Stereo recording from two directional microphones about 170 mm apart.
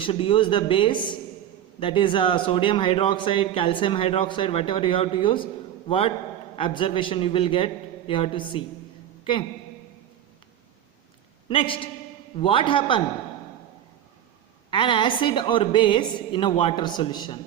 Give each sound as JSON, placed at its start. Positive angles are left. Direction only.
{"t": 0.0, "sound": "a man's voice", "side_deg": 30}
{"t": 11.4, "sound": "a man's voice", "side_deg": 30}
{"t": 14.7, "sound": "a woman's voice", "side_deg": 30}